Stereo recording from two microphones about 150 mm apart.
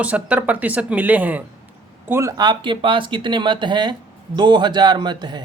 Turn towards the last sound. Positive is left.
turn(degrees=-30)  # may be behind; listen again after turning